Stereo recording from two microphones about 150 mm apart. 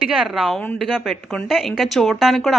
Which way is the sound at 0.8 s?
Centre (ahead or behind).